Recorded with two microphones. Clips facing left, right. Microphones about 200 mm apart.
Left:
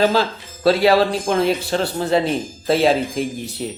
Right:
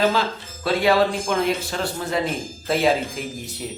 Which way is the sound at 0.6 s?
35° left (ahead or behind).